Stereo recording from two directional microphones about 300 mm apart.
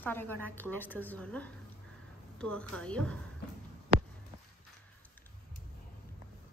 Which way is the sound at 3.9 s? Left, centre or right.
Right.